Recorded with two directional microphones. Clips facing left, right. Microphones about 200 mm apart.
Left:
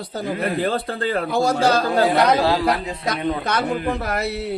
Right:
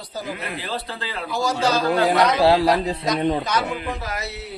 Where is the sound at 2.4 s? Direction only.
35° right (ahead or behind).